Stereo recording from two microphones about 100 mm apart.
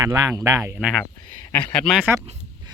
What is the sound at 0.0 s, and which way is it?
Speech, 30° right (ahead or behind).